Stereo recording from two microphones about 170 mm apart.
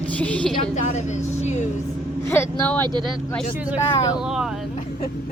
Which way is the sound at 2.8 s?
25° right (ahead or behind).